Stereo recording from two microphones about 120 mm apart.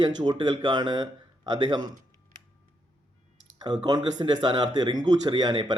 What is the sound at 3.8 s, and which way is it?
Speech, 35° right (ahead or behind).